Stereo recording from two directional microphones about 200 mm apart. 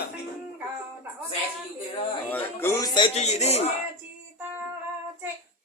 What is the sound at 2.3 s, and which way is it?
A man's voice, 10° left (ahead or behind).